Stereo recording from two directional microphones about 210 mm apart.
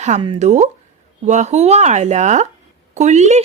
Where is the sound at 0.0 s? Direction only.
30° right (ahead or behind).